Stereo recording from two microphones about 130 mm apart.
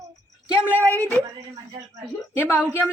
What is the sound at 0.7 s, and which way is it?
Speech, 20° right (ahead or behind).